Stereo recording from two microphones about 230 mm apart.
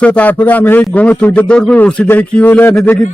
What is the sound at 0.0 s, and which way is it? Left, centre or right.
A man's voice, centre.